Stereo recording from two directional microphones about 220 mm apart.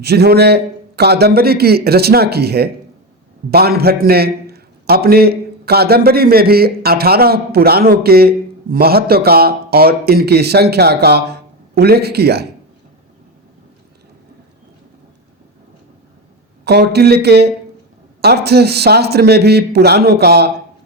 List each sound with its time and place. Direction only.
0.0 s a man's voice: 50° right (ahead or behind)
16.6 s a man's voice: 50° right (ahead or behind)